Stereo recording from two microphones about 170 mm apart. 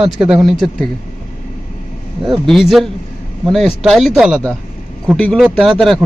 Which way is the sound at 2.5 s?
Centre (ahead or behind).